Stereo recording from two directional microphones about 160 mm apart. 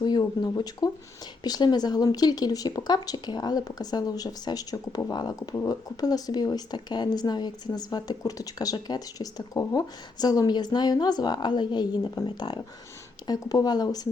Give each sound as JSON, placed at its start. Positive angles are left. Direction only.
{"t": 0.0, "sound": "speech", "side_deg": 25}